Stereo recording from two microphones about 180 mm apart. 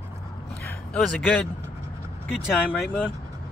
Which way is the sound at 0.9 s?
Centre (ahead or behind).